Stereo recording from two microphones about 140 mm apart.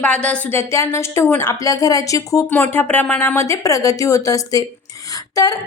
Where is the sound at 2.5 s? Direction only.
15° left (ahead or behind).